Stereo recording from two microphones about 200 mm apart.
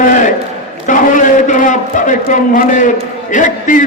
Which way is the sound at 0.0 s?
40° left (ahead or behind).